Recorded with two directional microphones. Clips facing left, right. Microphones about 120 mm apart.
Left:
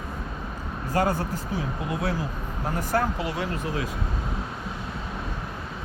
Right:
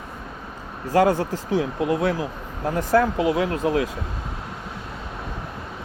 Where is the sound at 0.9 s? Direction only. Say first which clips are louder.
Right 6 dB; 90° right.